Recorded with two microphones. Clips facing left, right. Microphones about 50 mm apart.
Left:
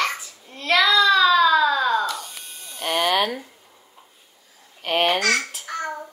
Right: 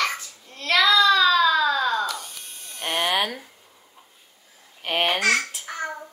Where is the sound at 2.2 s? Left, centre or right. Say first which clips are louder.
Left 2 dB; left.